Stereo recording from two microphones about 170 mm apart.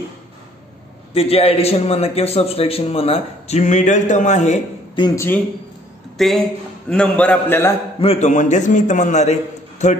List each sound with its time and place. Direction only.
1.1 s a man's voice: 35° left (ahead or behind)
4.9 s speech: 25° left (ahead or behind)
6.1 s a man's voice: centre (ahead or behind)
8.0 s a man's voice: 40° left (ahead or behind)